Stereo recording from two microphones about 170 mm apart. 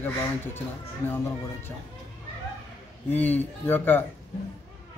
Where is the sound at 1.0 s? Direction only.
10° left (ahead or behind).